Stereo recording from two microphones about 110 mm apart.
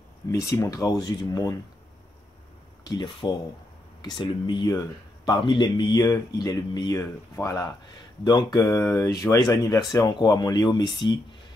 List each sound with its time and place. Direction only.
0.3 s speech: 30° left (ahead or behind)
0.8 s speech: 40° left (ahead or behind)
2.8 s speech: 45° left (ahead or behind)
7.0 s speech: 25° left (ahead or behind)
8.2 s speech: 40° left (ahead or behind)